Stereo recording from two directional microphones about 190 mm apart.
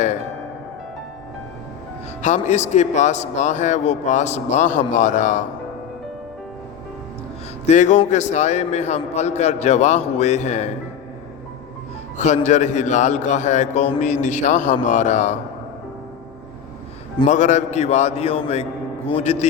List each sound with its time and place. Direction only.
2.2 s a man's voice: 40° left (ahead or behind)
7.7 s a man's voice: 40° left (ahead or behind)
12.1 s a man's voice: 40° left (ahead or behind)
17.2 s a man's voice: 40° left (ahead or behind)